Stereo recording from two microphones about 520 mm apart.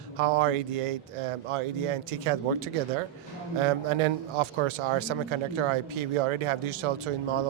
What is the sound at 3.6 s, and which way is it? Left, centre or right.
A man's voice, right.